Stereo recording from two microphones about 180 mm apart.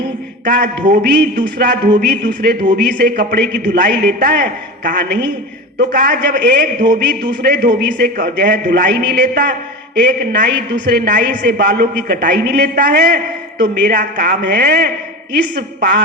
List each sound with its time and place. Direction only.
0.4 s a man's voice: 50° right (ahead or behind)
0.8 s a woman's voice: 75° right (ahead or behind)
1.4 s a man's voice: 50° right (ahead or behind)
4.9 s a woman's voice: 70° right (ahead or behind)
5.7 s a man's voice: 55° right (ahead or behind)
7.4 s a man's voice: 55° right (ahead or behind)
10.0 s a woman's voice: 70° right (ahead or behind)
10.8 s a man's voice: 60° right (ahead or behind)